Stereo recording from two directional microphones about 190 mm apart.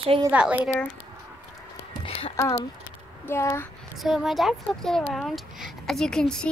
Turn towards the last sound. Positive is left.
turn(degrees=5)  # may be behind; listen again after turning